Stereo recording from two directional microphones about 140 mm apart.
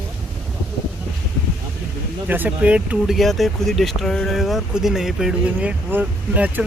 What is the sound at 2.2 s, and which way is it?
Speech, 15° right (ahead or behind).